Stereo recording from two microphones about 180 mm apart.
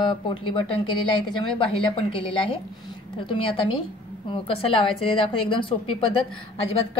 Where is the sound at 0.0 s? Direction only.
25° left (ahead or behind).